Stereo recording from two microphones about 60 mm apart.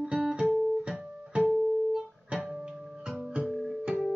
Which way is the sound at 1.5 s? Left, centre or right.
Centre.